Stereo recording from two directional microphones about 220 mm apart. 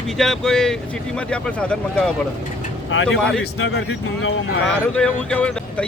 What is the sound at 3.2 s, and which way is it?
Speech, 5° left (ahead or behind).